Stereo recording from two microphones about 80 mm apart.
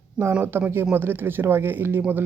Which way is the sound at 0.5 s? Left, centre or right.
Right.